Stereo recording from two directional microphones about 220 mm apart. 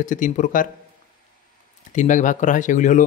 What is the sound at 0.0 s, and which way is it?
Speech, 35° left (ahead or behind).